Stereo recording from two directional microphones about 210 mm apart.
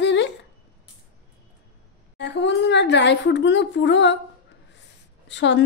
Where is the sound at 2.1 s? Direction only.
55° left (ahead or behind).